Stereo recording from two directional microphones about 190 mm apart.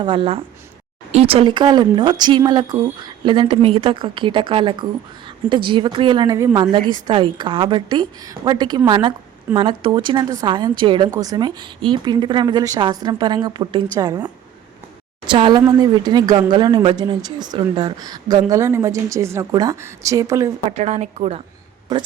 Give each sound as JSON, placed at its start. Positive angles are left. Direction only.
{"t": 0.0, "sound": "speech", "side_deg": -25}
{"t": 15.3, "sound": "speech", "side_deg": -25}
{"t": 20.7, "sound": "a woman's voice", "side_deg": -35}